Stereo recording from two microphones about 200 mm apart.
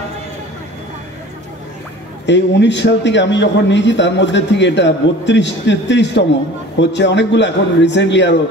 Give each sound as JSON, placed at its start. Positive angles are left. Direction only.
{"t": 2.2, "sound": "a man's voice", "side_deg": 60}